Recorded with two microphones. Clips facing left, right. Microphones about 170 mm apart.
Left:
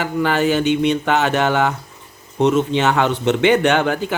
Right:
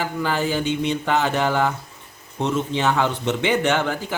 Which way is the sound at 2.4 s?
70° left (ahead or behind).